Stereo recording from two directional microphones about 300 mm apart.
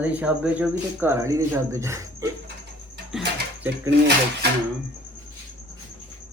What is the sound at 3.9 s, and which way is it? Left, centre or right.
Speech, right.